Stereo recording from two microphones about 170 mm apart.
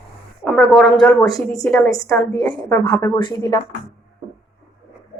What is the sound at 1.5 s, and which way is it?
A woman's voice, 20° left (ahead or behind).